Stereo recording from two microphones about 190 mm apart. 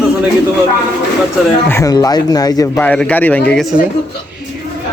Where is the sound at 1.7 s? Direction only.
15° left (ahead or behind).